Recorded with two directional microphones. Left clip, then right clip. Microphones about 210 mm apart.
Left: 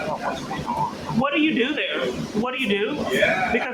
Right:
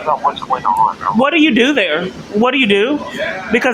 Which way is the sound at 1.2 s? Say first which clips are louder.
Right 9 dB; 50° right (ahead or behind).